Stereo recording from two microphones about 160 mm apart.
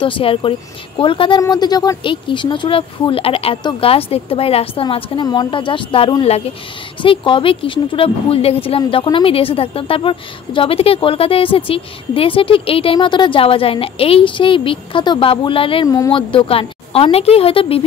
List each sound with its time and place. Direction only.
0.0 s a woman's voice: 35° left (ahead or behind)